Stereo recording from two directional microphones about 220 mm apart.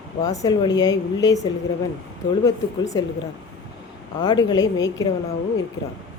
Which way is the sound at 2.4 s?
15° left (ahead or behind).